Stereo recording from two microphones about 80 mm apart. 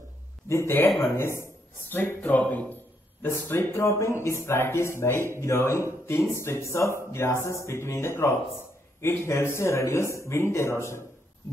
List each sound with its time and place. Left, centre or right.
0.5 s speech: left